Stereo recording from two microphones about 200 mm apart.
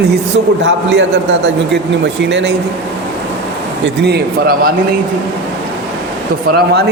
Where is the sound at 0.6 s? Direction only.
60° right (ahead or behind).